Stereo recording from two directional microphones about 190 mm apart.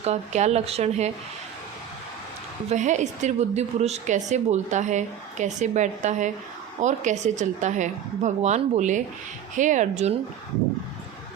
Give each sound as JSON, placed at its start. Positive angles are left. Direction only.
{"t": 0.0, "sound": "a woman's voice", "side_deg": -35}
{"t": 2.6, "sound": "a woman's voice", "side_deg": -40}